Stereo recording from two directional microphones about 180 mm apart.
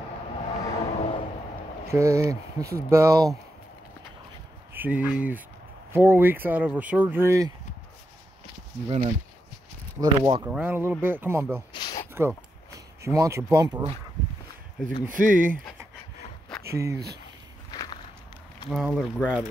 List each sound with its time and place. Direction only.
0.8 s a sound: 30° left (ahead or behind)
1.9 s speech: 15° right (ahead or behind)
4.7 s speech: 10° right (ahead or behind)
8.8 s speech: 35° right (ahead or behind)
10.4 s speech: 10° right (ahead or behind)
11.7 s a sound: 25° left (ahead or behind)
12.1 s a sound: 15° right (ahead or behind)
15.0 s speech: 50° right (ahead or behind)
16.6 s speech: 15° right (ahead or behind)
17.6 s walk: 20° left (ahead or behind)
18.7 s speech: centre (ahead or behind)